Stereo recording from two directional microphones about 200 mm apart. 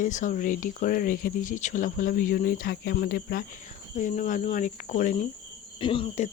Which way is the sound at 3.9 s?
40° left (ahead or behind).